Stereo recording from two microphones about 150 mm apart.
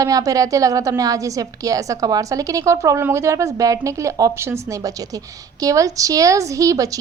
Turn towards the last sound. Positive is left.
turn(degrees=-20)  # may be behind; listen again after turning